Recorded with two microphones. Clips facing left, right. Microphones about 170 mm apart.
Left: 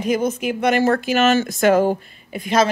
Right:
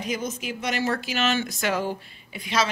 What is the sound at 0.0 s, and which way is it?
A woman's voice, 55° left (ahead or behind).